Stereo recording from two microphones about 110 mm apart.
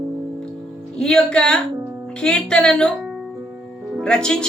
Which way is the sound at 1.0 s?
5° left (ahead or behind).